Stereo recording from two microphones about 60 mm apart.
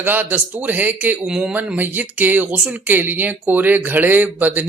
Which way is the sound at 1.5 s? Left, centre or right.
Right.